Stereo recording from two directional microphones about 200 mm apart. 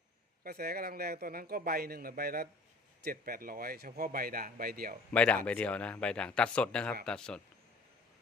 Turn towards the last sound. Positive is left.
turn(degrees=5)  # may be behind; listen again after turning